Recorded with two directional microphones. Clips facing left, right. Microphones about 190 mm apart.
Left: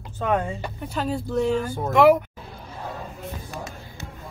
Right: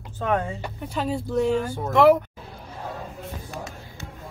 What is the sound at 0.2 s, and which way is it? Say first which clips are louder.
Speech: left 1 dB; 15° left (ahead or behind).